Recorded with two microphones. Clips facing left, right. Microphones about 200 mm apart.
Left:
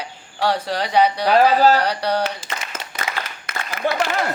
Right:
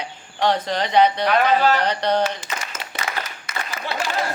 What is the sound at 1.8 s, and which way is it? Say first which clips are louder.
Speech: right 1 dB; 10° left (ahead or behind).